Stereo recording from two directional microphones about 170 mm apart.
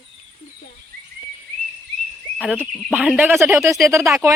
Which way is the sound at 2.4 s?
5° right (ahead or behind).